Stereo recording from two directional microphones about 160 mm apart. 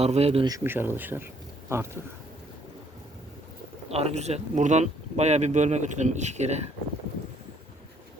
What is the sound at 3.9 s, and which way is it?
Speech, 40° right (ahead or behind).